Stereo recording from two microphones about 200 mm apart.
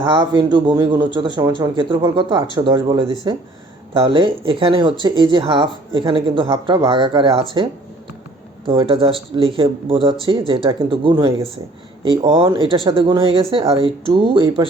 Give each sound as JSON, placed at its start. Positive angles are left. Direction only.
{"t": 0.0, "sound": "speech", "side_deg": -20}